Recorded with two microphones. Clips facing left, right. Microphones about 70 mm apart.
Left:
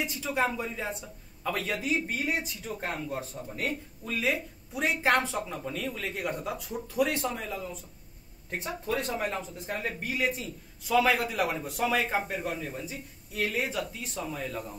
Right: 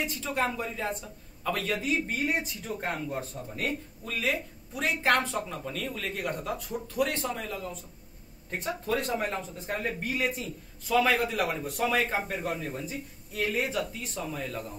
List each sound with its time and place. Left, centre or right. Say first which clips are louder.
0.0 s speech: left 1 dB; centre